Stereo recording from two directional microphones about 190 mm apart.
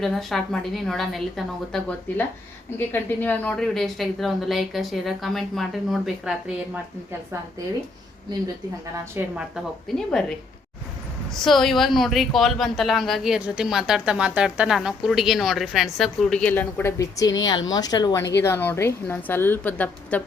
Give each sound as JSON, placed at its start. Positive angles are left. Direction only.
{"t": 0.0, "sound": "a woman's voice", "side_deg": 0}
{"t": 9.2, "sound": "speech", "side_deg": -10}
{"t": 10.1, "sound": "a woman's voice", "side_deg": 5}